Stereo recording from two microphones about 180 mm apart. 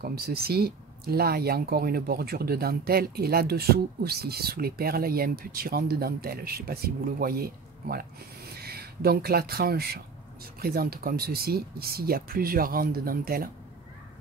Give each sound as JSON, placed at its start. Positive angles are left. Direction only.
{"t": 0.0, "sound": "speech", "side_deg": -60}